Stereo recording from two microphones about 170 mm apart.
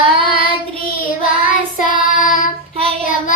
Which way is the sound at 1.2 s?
50° left (ahead or behind).